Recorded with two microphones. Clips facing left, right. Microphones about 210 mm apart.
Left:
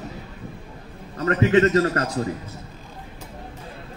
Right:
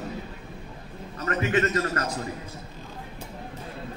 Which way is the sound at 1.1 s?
30° left (ahead or behind).